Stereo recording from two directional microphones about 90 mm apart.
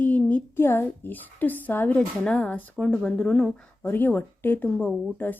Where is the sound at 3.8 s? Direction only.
20° left (ahead or behind).